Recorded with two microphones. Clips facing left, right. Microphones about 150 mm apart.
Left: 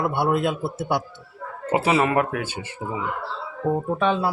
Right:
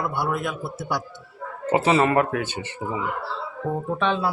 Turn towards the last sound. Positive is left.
turn(degrees=10)  # may be behind; listen again after turning